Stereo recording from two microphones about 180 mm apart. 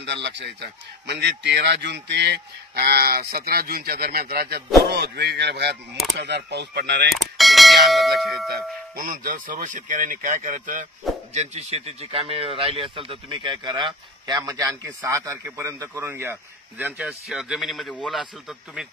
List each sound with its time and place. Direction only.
0.0 s speech: 75° right (ahead or behind)
7.3 s speech: centre (ahead or behind)
8.5 s speech: 55° right (ahead or behind)
11.3 s speech: 35° right (ahead or behind); by 18.3 s centre (ahead or behind)